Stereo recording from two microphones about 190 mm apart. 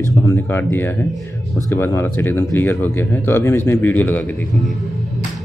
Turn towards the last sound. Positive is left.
turn(degrees=10)  # may be behind; listen again after turning